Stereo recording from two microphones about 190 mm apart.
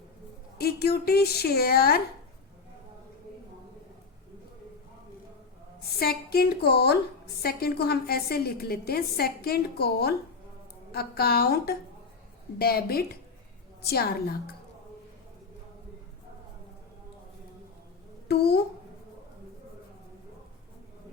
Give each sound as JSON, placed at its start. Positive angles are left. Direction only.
{"t": 0.6, "sound": "a woman's voice", "side_deg": 55}
{"t": 6.0, "sound": "a woman's voice", "side_deg": 55}
{"t": 18.3, "sound": "a child's voice", "side_deg": 55}